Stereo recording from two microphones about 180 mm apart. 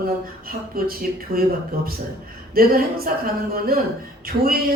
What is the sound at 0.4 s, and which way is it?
Speech, 55° right (ahead or behind).